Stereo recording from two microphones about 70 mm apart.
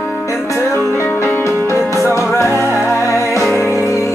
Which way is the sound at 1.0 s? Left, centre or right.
Left.